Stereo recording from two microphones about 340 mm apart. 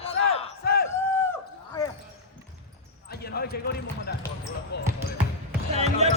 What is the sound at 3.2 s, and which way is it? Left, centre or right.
Basketball bounce, left.